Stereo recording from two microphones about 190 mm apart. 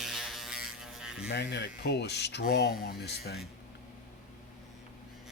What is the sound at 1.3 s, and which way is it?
Speech, 60° left (ahead or behind).